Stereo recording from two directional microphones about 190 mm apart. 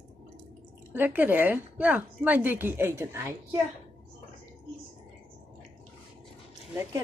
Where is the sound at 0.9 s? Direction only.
10° right (ahead or behind).